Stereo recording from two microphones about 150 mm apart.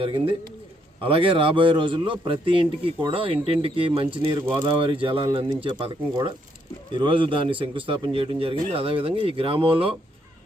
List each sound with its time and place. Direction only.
0.0 s a man's voice: 35° right (ahead or behind)